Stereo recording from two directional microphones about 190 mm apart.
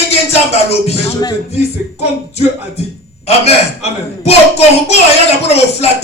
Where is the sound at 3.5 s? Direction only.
35° left (ahead or behind).